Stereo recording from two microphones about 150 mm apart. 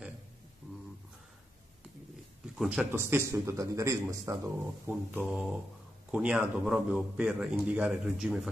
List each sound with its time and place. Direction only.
2.5 s speech: 5° right (ahead or behind)